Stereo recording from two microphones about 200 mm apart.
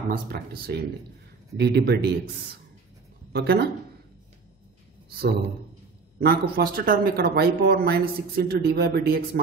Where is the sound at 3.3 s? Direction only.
55° right (ahead or behind).